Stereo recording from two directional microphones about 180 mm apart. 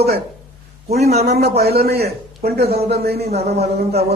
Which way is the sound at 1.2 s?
60° right (ahead or behind).